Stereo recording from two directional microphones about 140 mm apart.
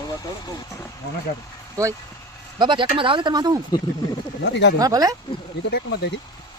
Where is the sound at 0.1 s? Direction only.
25° left (ahead or behind).